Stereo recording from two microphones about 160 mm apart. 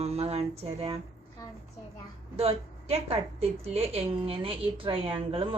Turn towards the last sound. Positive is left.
turn(degrees=-35)  # may be behind; listen again after turning